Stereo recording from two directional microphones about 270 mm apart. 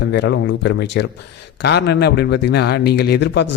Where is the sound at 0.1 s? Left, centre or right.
Left.